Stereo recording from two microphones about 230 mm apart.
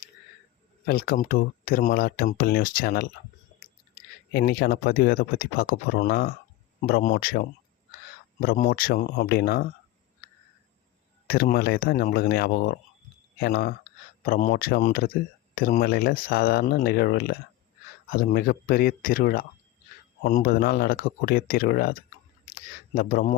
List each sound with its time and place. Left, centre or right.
0.9 s speech: left
4.3 s speech: left
11.3 s speech: left
23.0 s speech: left